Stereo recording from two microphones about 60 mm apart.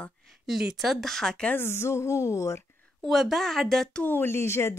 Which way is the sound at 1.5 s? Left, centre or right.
Left.